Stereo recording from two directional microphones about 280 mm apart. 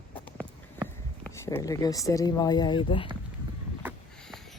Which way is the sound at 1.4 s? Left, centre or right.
Centre.